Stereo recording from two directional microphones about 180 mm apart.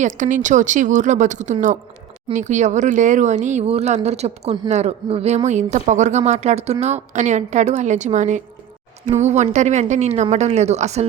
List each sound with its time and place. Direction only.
0.0 s speech: 45° right (ahead or behind)